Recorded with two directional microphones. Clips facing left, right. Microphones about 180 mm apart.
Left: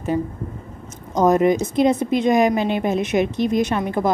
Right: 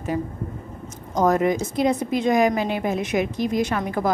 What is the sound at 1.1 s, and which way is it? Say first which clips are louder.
A woman's voice: left 4 dB; 20° left (ahead or behind).